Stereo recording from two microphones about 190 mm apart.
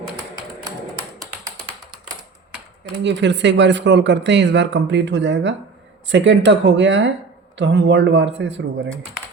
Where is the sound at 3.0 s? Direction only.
70° right (ahead or behind).